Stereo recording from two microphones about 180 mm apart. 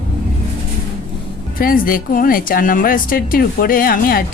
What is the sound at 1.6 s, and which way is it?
Speech, 50° left (ahead or behind).